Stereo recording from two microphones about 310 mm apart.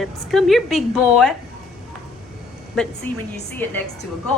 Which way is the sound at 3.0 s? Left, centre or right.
Centre.